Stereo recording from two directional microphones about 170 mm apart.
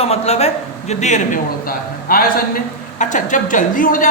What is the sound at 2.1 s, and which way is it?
A man's voice, 55° left (ahead or behind).